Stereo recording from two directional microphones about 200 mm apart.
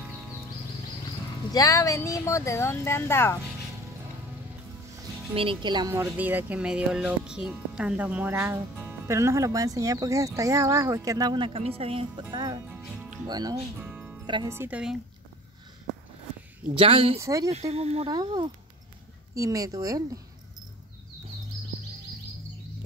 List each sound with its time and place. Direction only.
1.5 s speech: 15° left (ahead or behind)
5.3 s speech: 25° right (ahead or behind); by 14.2 s 10° right (ahead or behind)
14.2 s speech: 25° right (ahead or behind)
14.5 s speech: 10° right (ahead or behind)
16.7 s speech: 30° right (ahead or behind)
17.2 s speech: 15° right (ahead or behind)
17.5 s speech: 30° right (ahead or behind)